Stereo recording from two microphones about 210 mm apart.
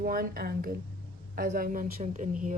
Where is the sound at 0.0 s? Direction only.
45° right (ahead or behind).